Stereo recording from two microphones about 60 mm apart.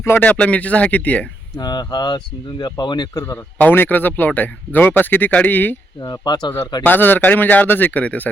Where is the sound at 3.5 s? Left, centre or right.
Left.